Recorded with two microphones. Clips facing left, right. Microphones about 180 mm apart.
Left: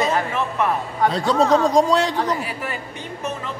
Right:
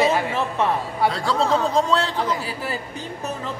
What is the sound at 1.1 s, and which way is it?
Speech, 20° left (ahead or behind).